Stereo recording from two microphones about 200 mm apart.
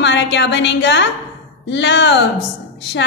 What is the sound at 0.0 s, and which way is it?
A woman's voice, 60° left (ahead or behind).